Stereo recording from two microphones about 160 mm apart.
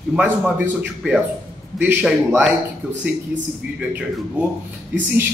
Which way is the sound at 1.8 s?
10° right (ahead or behind).